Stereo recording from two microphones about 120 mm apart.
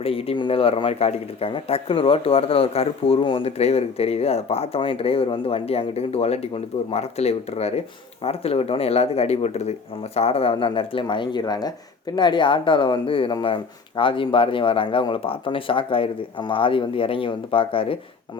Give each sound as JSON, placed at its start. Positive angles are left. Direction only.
{"t": 0.0, "sound": "speech", "side_deg": 55}
{"t": 10.2, "sound": "speech", "side_deg": 55}